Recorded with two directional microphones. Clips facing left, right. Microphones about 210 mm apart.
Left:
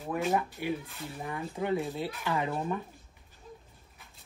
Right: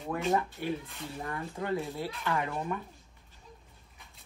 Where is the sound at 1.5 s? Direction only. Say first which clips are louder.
Left 3 dB; 20° left (ahead or behind).